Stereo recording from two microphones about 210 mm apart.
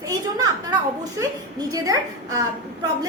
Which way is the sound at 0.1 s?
15° right (ahead or behind).